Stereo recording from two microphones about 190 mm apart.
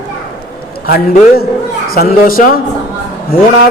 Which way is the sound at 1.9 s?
50° left (ahead or behind).